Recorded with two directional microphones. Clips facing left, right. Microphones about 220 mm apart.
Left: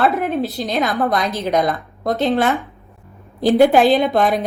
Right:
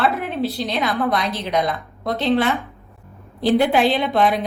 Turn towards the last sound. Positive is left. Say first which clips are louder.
# left 2 dB
turn(degrees=45)  # may be behind; listen again after turning